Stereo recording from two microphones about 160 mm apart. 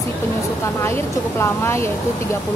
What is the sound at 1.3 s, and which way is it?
Speech, 15° left (ahead or behind).